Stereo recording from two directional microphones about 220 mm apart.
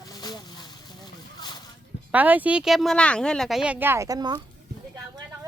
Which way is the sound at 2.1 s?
10° right (ahead or behind).